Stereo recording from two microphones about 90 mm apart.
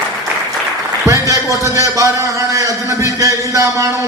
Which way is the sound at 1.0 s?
35° right (ahead or behind).